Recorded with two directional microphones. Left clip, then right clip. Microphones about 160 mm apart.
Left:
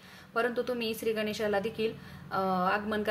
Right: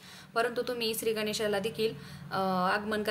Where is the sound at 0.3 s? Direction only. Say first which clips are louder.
Even; centre (ahead or behind).